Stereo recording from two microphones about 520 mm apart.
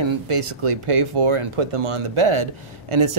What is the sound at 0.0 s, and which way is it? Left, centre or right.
Speech, right.